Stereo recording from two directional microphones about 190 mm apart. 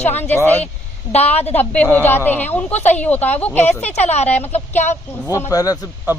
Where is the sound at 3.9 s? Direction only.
35° left (ahead or behind).